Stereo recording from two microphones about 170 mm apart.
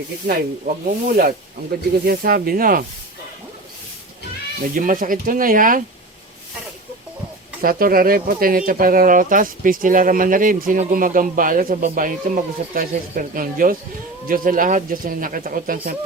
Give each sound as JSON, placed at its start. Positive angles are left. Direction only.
{"t": 0.9, "sound": "speech", "side_deg": -55}
{"t": 4.7, "sound": "speech", "side_deg": -55}
{"t": 7.6, "sound": "speech", "side_deg": -60}